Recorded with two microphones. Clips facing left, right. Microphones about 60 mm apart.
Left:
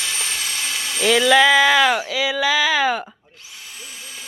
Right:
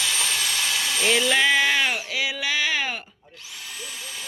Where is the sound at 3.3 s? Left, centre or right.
Left.